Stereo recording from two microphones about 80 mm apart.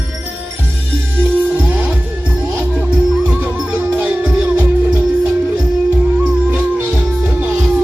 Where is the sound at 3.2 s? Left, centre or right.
Centre.